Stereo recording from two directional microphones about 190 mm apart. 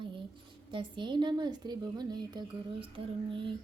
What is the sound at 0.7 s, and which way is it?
Speech, 25° right (ahead or behind).